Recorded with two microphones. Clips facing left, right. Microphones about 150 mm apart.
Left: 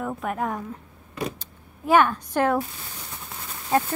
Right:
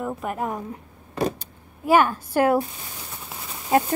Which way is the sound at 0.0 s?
Centre (ahead or behind).